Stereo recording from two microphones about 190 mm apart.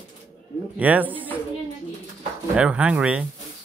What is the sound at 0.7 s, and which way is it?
Speech, 10° right (ahead or behind).